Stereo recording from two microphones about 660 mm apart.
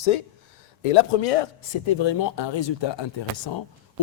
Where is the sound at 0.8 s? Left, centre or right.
Left.